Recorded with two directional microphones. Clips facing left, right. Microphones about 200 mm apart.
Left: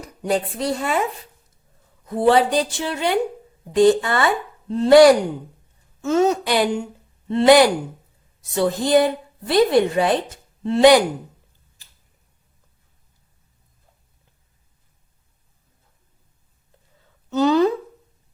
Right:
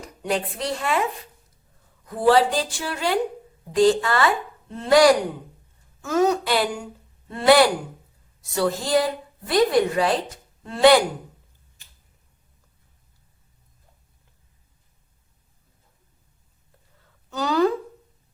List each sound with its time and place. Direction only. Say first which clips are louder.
0.2 s speech: left 4 dB; 30° left (ahead or behind)
2.0 s speech: left 2 dB; 25° left (ahead or behind)
17.2 s a sound: left 4 dB; 20° left (ahead or behind)